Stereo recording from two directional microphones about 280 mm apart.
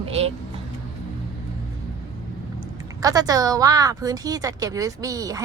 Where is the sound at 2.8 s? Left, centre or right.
Centre.